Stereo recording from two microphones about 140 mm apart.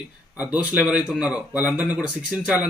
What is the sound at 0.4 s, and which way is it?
A man's voice, 10° right (ahead or behind).